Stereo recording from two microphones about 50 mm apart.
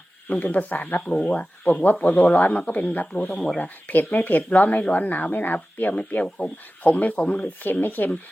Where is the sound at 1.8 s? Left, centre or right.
Left.